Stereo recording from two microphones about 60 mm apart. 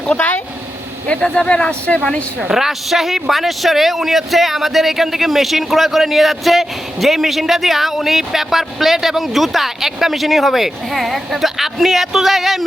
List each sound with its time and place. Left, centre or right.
0.1 s speech: left
1.0 s speech: centre
2.4 s speech: centre